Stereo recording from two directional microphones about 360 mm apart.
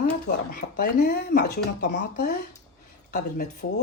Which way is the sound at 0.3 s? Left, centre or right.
Left.